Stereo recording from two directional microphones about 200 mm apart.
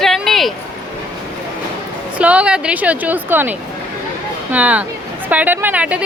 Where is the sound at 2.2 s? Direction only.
5° right (ahead or behind).